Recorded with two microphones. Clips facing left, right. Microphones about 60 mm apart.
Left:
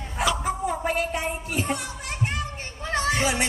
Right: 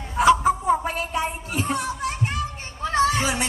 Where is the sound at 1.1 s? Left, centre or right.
Right.